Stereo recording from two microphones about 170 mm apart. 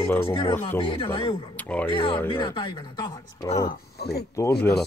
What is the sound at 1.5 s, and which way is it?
Speech, 10° left (ahead or behind).